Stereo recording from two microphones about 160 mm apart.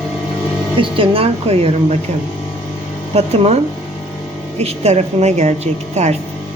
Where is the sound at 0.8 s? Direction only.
35° right (ahead or behind).